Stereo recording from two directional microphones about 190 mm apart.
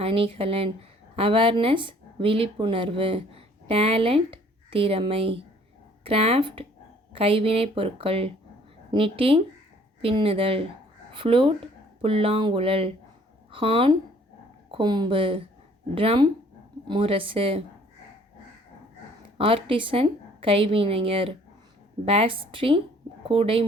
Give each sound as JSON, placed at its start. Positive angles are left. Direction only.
{"t": 0.0, "sound": "a woman's voice", "side_deg": -30}
{"t": 19.4, "sound": "a woman's voice", "side_deg": -30}